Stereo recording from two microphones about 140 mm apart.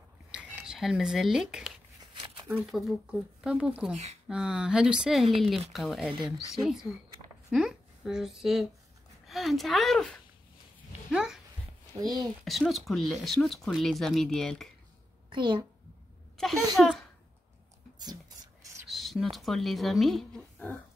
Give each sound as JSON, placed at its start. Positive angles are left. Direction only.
{"t": 0.3, "sound": "speech", "side_deg": -5}
{"t": 2.7, "sound": "speech", "side_deg": -5}
{"t": 3.9, "sound": "speech", "side_deg": -50}
{"t": 4.3, "sound": "a woman's voice", "side_deg": -5}
{"t": 11.1, "sound": "a sound", "side_deg": -5}
{"t": 12.0, "sound": "speech", "side_deg": -30}
{"t": 12.4, "sound": "speech", "side_deg": 0}
{"t": 15.2, "sound": "a child's voice", "side_deg": -35}
{"t": 16.4, "sound": "a child's voice", "side_deg": 5}
{"t": 18.9, "sound": "a sound", "side_deg": 0}
{"t": 19.3, "sound": "speech", "side_deg": 0}